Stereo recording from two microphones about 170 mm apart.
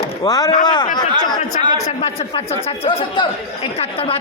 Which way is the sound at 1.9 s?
40° left (ahead or behind).